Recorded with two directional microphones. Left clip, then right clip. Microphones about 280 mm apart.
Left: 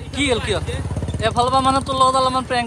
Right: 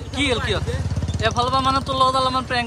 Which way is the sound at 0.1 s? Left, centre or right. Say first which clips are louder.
Left 2 dB; centre.